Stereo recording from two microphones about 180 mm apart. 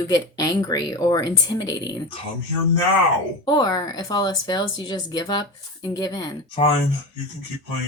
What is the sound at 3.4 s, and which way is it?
Speech, 25° left (ahead or behind).